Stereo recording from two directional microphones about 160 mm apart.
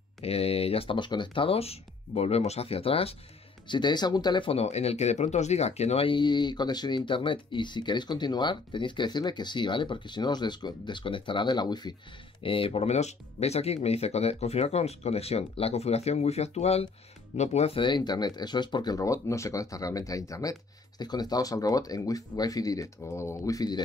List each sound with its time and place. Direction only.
0.2 s speech: 40° left (ahead or behind)